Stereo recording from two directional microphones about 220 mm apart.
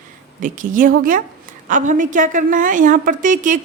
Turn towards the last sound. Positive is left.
turn(degrees=-35)  # may be behind; listen again after turning